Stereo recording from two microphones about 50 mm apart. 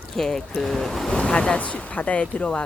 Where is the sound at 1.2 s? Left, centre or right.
Left.